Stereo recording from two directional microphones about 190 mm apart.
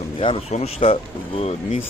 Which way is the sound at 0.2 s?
30° left (ahead or behind).